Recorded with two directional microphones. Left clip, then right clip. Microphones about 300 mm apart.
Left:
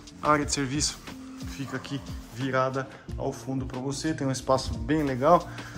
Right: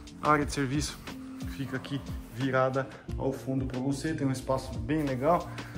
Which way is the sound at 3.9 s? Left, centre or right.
Centre.